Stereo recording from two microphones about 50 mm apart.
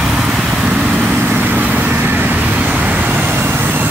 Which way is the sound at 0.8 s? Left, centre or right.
Right.